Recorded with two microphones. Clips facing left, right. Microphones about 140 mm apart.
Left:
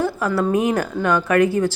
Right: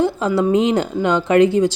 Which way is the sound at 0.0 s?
20° right (ahead or behind).